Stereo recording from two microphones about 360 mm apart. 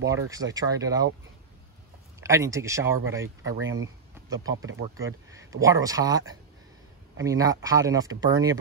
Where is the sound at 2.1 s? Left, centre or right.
Centre.